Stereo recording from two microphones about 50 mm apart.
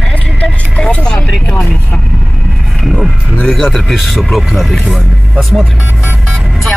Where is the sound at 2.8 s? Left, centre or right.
Centre.